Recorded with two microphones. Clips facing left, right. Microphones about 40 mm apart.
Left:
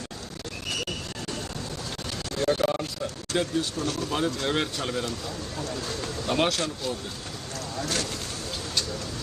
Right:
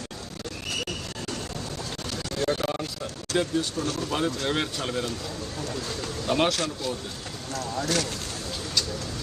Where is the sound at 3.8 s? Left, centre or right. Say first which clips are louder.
Even; right.